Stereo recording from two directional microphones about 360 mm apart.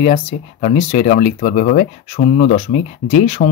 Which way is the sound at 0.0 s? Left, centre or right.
Centre.